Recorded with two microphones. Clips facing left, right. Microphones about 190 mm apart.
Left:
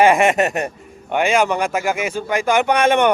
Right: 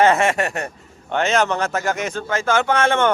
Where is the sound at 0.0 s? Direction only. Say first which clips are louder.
Left 3 dB; 15° left (ahead or behind).